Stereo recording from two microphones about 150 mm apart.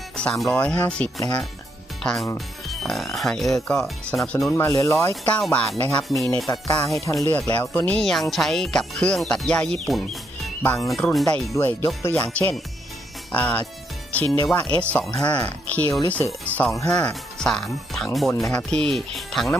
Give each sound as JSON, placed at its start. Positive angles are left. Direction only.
{"t": 0.2, "sound": "speech", "side_deg": 5}
{"t": 2.6, "sound": "music", "side_deg": 0}
{"t": 4.5, "sound": "speech", "side_deg": 20}
{"t": 5.7, "sound": "speech", "side_deg": 20}
{"t": 6.0, "sound": "music", "side_deg": 0}
{"t": 6.5, "sound": "speech", "side_deg": 20}
{"t": 8.3, "sound": "music", "side_deg": 0}
{"t": 11.5, "sound": "speech", "side_deg": 15}
{"t": 16.8, "sound": "music", "side_deg": 5}